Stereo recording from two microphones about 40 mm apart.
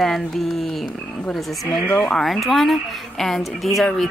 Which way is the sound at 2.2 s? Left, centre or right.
Centre.